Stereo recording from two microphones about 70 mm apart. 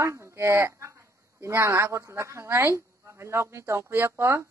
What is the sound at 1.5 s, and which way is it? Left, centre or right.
Speech, right.